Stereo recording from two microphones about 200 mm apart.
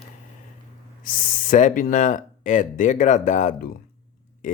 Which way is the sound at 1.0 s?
45° left (ahead or behind).